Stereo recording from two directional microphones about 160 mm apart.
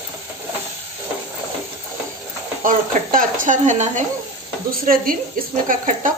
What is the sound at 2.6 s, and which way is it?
Speech, 60° right (ahead or behind).